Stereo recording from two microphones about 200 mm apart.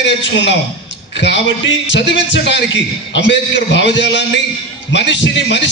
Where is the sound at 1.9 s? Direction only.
65° left (ahead or behind).